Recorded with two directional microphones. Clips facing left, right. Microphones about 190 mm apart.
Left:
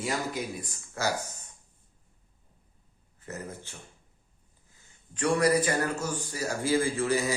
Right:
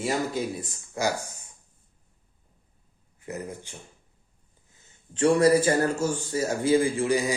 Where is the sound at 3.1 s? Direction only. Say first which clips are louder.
Right 4 dB; 15° right (ahead or behind).